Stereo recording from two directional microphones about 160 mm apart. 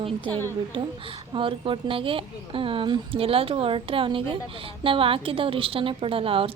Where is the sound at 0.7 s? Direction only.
35° right (ahead or behind).